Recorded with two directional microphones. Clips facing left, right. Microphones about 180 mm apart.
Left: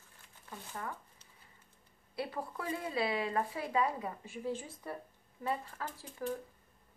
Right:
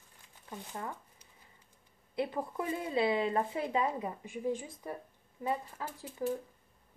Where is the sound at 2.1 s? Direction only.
20° right (ahead or behind).